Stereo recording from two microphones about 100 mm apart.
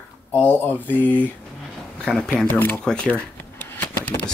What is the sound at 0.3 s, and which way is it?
Speech, 20° left (ahead or behind).